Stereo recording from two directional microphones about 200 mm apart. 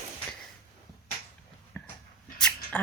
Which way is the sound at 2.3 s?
5° left (ahead or behind).